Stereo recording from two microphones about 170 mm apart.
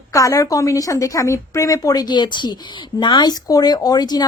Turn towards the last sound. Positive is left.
turn(degrees=25)  # may be behind; listen again after turning